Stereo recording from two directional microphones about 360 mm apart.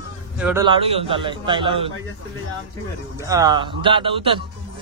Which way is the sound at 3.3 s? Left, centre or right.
Centre.